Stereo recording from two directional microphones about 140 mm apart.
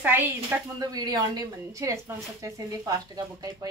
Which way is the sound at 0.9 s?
25° right (ahead or behind).